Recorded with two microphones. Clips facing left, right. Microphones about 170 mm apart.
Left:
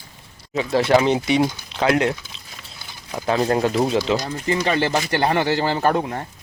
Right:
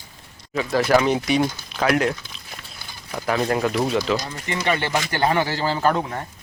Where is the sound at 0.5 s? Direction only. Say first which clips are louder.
Left 1 dB; 30° left (ahead or behind).